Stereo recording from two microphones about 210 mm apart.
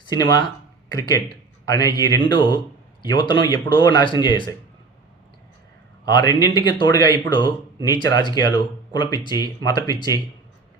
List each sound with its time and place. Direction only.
0.0 s speech: 20° left (ahead or behind)
6.1 s speech: 20° left (ahead or behind)